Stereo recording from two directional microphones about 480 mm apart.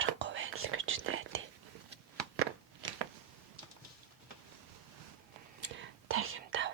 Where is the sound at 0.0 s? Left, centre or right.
Right.